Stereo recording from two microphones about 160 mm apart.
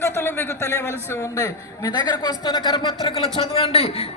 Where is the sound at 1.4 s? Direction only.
25° left (ahead or behind).